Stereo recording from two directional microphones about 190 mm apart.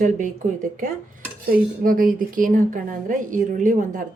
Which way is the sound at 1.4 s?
50° right (ahead or behind).